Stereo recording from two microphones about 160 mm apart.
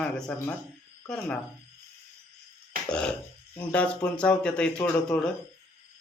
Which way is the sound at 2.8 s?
5° left (ahead or behind).